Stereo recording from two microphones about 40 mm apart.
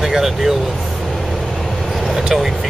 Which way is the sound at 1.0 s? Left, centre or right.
Centre.